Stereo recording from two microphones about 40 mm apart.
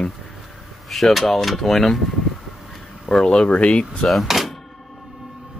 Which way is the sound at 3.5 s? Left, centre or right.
Left.